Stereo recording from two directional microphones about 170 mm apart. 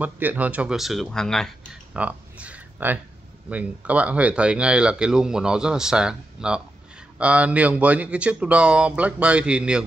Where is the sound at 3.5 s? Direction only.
10° right (ahead or behind).